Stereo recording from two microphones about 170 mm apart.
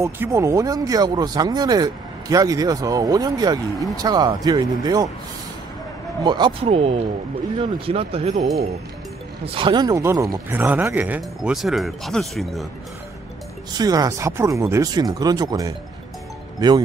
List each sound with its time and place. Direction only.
0.0 s speech: 15° right (ahead or behind)
6.2 s speech: 25° right (ahead or behind)
9.6 s speech: 25° right (ahead or behind); by 12.6 s centre (ahead or behind)
13.7 s speech: 20° right (ahead or behind)